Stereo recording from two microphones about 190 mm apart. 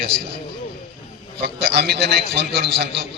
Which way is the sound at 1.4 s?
60° right (ahead or behind).